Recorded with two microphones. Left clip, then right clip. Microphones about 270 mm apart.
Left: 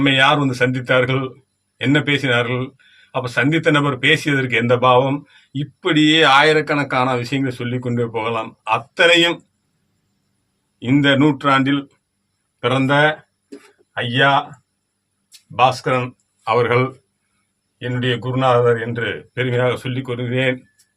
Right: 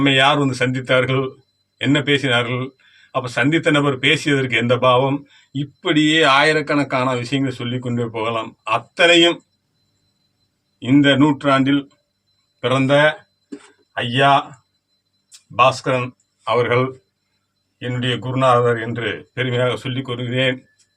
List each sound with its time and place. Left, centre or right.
0.0 s speech: centre
10.8 s a man's voice: centre
15.5 s speech: centre